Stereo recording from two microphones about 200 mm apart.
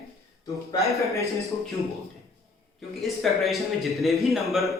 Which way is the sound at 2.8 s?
Centre (ahead or behind).